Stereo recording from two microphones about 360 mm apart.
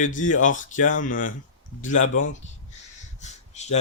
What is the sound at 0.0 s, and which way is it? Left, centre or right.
Speech, left.